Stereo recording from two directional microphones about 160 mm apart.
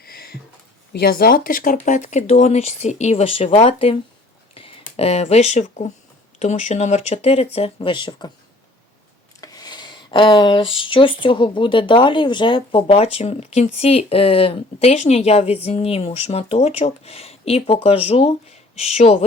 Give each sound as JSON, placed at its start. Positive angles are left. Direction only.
{"t": 0.0, "sound": "a sound", "side_deg": 70}
{"t": 0.9, "sound": "speech", "side_deg": 70}
{"t": 9.4, "sound": "speech", "side_deg": 25}